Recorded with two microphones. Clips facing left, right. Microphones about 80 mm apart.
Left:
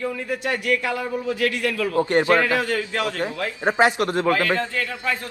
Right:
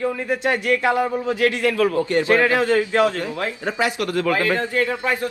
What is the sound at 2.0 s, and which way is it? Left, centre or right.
Speech, left.